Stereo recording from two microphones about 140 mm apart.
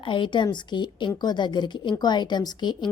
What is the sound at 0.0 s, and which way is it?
A woman's voice, 35° left (ahead or behind).